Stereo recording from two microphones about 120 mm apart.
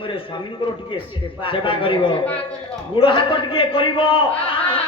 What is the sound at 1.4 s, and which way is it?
A man's voice, 45° left (ahead or behind).